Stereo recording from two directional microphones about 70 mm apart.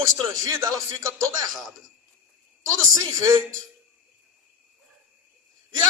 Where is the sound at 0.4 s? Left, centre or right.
Right.